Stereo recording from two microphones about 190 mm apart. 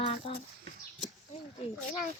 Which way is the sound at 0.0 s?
30° left (ahead or behind).